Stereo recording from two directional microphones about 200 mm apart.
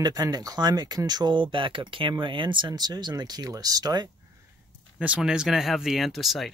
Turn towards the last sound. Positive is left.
turn(degrees=0)  # may be behind; listen again after turning